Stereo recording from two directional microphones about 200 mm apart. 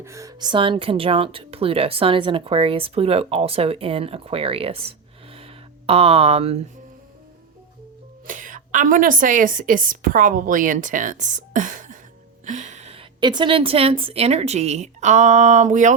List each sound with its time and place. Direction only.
0.0 s speech: 15° right (ahead or behind); by 6.6 s 30° right (ahead or behind)
8.3 s a woman's voice: 40° right (ahead or behind)